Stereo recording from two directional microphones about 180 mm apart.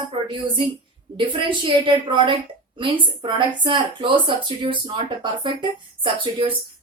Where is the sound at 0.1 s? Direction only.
30° right (ahead or behind).